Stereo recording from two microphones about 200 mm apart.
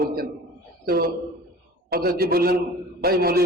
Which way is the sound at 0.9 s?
50° right (ahead or behind).